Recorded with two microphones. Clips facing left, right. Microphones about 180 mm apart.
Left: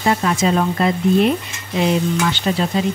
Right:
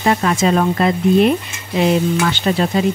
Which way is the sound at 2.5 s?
60° right (ahead or behind).